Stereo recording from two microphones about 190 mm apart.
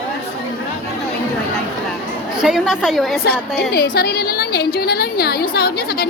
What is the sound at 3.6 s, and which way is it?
A woman's voice, 55° left (ahead or behind).